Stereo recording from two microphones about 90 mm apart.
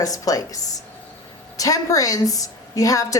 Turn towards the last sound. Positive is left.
turn(degrees=40)  # may be behind; listen again after turning